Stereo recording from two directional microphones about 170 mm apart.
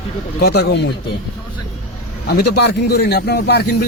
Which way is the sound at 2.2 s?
70° left (ahead or behind).